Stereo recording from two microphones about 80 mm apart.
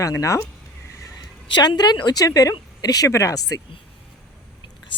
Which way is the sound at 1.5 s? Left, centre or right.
Left.